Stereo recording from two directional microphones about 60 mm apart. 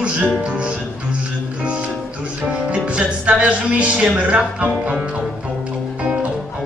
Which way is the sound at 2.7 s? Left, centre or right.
Right.